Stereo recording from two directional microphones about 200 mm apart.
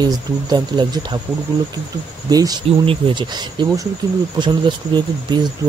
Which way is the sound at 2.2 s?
20° right (ahead or behind).